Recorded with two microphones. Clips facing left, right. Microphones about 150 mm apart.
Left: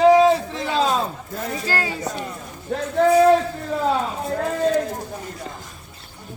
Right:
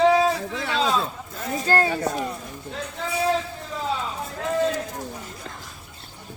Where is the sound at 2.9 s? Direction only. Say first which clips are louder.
Left 12 dB; 60° left (ahead or behind).